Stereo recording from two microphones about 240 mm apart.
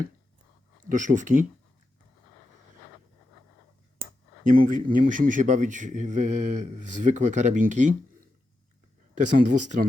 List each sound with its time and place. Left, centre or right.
0.9 s speech: right
4.0 s speech: right
9.1 s speech: right